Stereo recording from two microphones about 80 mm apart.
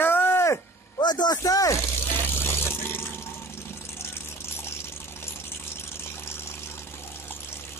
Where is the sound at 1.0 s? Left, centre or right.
Left.